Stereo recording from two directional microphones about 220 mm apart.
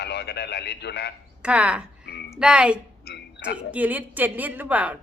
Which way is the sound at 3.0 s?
50° left (ahead or behind).